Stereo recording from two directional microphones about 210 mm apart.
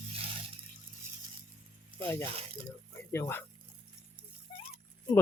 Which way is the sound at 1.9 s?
10° left (ahead or behind).